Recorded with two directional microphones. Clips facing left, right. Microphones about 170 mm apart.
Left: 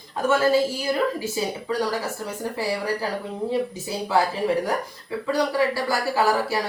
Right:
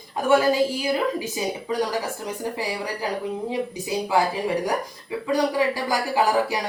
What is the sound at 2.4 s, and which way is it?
Speech, 15° right (ahead or behind).